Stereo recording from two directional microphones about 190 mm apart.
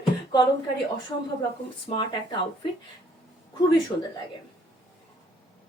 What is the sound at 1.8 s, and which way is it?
Speech, 25° left (ahead or behind).